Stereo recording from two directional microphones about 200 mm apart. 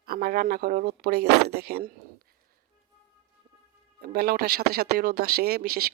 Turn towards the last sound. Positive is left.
turn(degrees=-50)  # may be behind; listen again after turning